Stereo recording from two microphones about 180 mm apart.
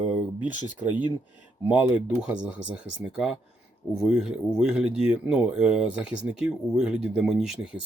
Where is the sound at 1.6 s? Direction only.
10° right (ahead or behind).